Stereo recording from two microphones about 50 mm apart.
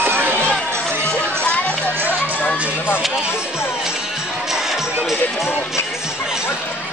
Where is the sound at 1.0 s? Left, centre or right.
Left.